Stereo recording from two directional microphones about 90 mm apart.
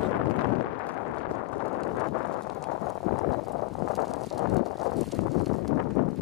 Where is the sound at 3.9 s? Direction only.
Centre (ahead or behind).